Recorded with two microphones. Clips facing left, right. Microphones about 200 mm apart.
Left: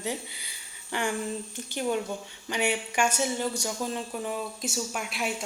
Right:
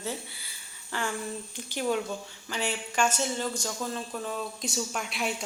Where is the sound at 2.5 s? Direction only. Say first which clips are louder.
Left 3 dB; 15° left (ahead or behind).